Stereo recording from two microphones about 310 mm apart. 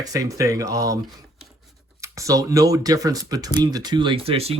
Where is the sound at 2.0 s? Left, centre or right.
Centre.